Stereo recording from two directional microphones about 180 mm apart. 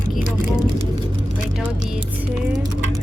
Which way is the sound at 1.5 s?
5° right (ahead or behind).